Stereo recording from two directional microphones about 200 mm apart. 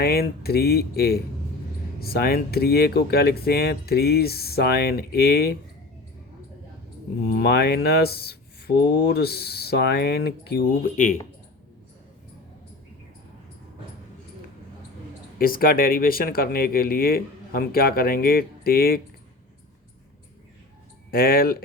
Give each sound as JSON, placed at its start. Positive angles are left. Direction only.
{"t": 0.0, "sound": "speech", "side_deg": 50}
{"t": 7.3, "sound": "speech", "side_deg": 50}
{"t": 10.9, "sound": "speech", "side_deg": 40}
{"t": 15.4, "sound": "speech", "side_deg": 45}
{"t": 21.1, "sound": "speech", "side_deg": 50}